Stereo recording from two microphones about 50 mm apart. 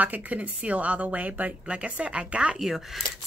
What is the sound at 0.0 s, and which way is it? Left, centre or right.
A woman's voice, right.